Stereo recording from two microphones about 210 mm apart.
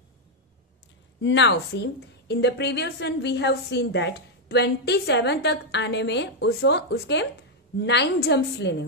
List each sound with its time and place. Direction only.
1.2 s a woman's voice: 60° left (ahead or behind)